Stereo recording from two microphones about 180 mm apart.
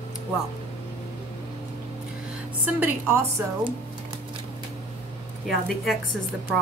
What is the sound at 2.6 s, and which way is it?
Speech, 10° right (ahead or behind).